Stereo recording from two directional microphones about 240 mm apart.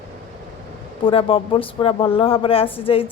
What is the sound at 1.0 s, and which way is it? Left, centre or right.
A woman's voice, left.